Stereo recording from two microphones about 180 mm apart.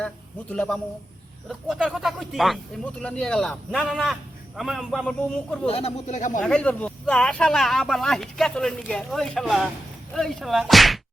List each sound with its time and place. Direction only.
0.0 s a man's voice: 5° left (ahead or behind)
5.6 s speech: 35° left (ahead or behind)
6.4 s speech: 5° left (ahead or behind)